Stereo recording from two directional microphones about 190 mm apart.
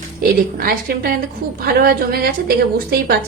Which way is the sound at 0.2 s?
50° right (ahead or behind).